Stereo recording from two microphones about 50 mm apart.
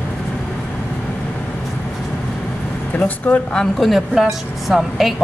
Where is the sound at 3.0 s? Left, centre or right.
Left.